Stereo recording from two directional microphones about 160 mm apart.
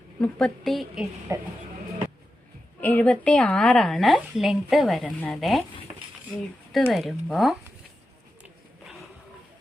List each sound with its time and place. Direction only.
0.2 s speech: 5° left (ahead or behind)
1.3 s speech: 20° right (ahead or behind)
2.8 s speech: 10° left (ahead or behind)
6.7 s speech: centre (ahead or behind)